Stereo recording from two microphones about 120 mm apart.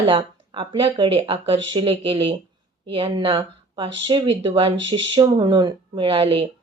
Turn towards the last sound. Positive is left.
turn(degrees=-50)  # may be behind; listen again after turning